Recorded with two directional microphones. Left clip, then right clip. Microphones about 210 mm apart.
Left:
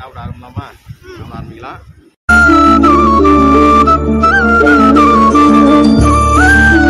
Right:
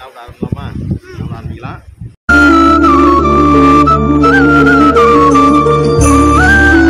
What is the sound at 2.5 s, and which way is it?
Music, centre (ahead or behind).